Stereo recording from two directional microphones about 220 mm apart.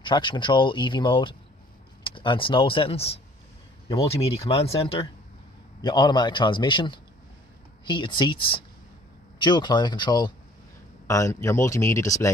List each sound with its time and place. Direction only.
0.0 s speech: 20° left (ahead or behind)
4.5 s speech: 25° left (ahead or behind)